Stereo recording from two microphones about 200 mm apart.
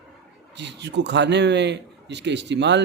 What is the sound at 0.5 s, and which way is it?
A man's voice, 60° right (ahead or behind).